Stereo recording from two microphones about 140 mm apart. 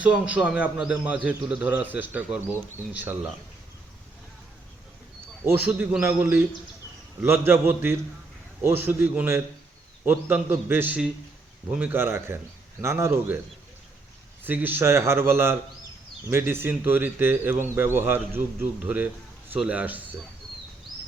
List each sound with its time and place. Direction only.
0.0 s a man's voice: 10° right (ahead or behind)
5.5 s a man's voice: 15° right (ahead or behind)
14.4 s a man's voice: 10° right (ahead or behind)
19.5 s a man's voice: 10° right (ahead or behind)